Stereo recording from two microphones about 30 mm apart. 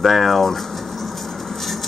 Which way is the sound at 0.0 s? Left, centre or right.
Centre.